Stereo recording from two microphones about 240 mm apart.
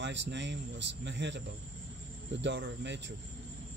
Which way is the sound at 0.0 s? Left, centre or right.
Right.